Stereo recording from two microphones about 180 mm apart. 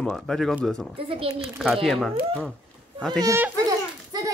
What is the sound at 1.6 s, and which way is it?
Speech, centre (ahead or behind).